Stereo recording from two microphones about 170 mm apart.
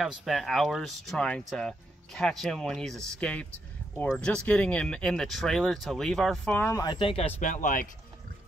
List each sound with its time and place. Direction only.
0.0 s speech: centre (ahead or behind)
6.8 s speech: 30° left (ahead or behind); by 7.9 s 55° left (ahead or behind)